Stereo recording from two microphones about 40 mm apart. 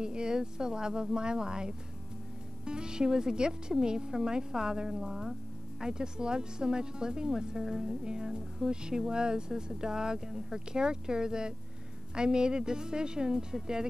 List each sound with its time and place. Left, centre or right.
0.0 s speech: right